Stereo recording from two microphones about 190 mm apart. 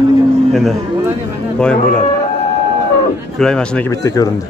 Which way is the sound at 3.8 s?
20° left (ahead or behind).